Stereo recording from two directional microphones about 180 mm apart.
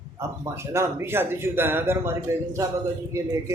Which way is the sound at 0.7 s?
15° right (ahead or behind).